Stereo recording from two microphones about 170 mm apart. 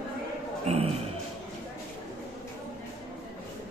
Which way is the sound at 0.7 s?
40° right (ahead or behind).